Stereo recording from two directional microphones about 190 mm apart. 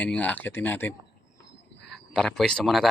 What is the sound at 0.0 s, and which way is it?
Speech, 5° left (ahead or behind).